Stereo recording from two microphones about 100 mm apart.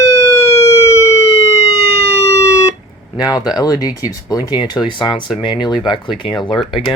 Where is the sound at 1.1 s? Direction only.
90° left.